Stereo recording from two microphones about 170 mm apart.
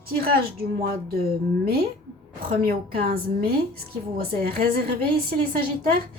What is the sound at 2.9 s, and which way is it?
Speech, 65° right (ahead or behind).